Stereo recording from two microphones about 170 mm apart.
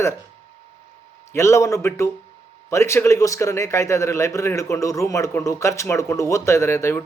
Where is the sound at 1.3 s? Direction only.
15° left (ahead or behind).